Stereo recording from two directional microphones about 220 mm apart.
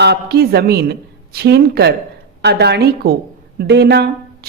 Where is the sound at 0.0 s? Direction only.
45° right (ahead or behind).